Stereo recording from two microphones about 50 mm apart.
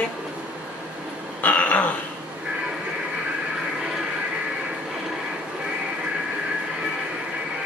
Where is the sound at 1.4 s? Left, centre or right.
Left.